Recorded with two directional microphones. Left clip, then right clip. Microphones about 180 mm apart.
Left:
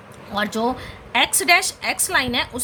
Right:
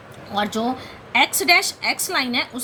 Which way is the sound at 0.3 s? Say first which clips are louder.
Left 1 dB; 25° left (ahead or behind).